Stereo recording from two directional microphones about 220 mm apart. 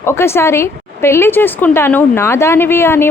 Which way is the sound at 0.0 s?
10° left (ahead or behind).